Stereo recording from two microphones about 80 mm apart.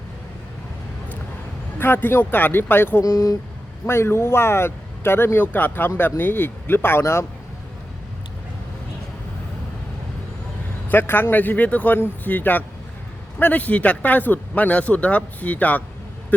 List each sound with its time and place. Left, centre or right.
1.8 s speech: left
3.0 s speech: left
3.8 s speech: left
10.8 s speech: left